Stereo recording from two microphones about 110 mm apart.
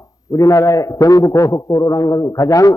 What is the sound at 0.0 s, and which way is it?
A man's voice, 30° left (ahead or behind).